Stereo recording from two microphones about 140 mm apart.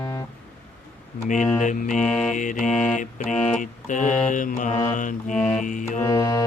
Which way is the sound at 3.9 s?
65° left (ahead or behind).